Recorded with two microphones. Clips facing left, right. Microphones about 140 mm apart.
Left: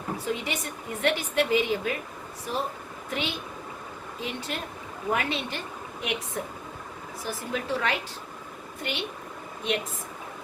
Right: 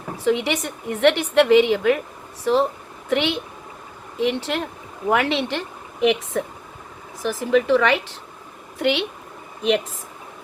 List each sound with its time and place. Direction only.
0.3 s a woman's voice: 80° right
3.1 s a woman's voice: 75° right (ahead or behind); by 7.9 s 90° right
8.8 s speech: 70° right (ahead or behind)